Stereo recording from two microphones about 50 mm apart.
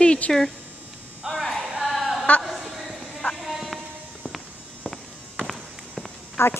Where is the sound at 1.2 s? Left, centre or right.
Centre.